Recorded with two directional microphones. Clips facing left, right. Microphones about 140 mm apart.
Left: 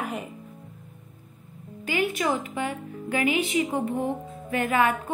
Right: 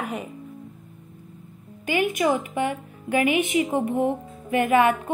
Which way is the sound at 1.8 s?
15° right (ahead or behind).